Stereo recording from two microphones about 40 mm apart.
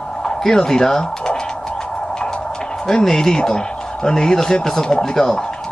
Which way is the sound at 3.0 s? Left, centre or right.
Centre.